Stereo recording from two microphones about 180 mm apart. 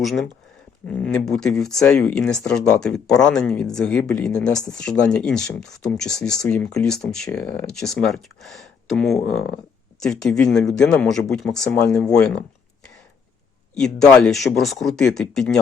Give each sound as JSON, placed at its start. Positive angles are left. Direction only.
{"t": 0.0, "sound": "speech", "side_deg": 0}
{"t": 13.7, "sound": "speech", "side_deg": 5}